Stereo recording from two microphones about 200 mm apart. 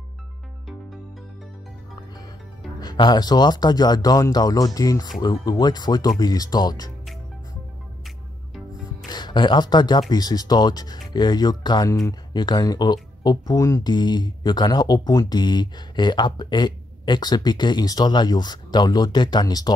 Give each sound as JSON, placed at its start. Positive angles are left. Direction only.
{"t": 2.8, "sound": "speech", "side_deg": 20}
{"t": 9.1, "sound": "speech", "side_deg": 20}